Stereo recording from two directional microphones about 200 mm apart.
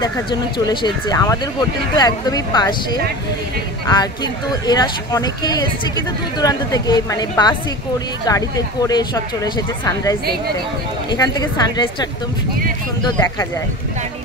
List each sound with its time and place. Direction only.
0.0 s speech: 20° left (ahead or behind)